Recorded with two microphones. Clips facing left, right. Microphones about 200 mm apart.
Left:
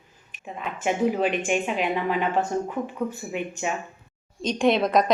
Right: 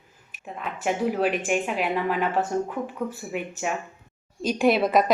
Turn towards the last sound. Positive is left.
turn(degrees=-5)  # may be behind; listen again after turning